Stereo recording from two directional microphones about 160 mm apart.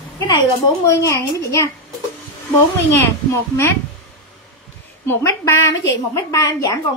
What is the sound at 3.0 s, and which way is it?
Speech, 15° left (ahead or behind).